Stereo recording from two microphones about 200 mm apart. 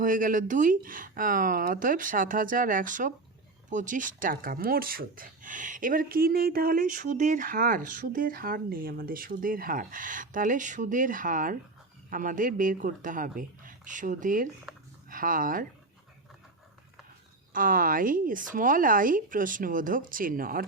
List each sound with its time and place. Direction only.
0.0 s speech: 40° right (ahead or behind)
14.7 s a sound: centre (ahead or behind)
15.1 s speech: 45° right (ahead or behind)
17.5 s speech: 45° right (ahead or behind)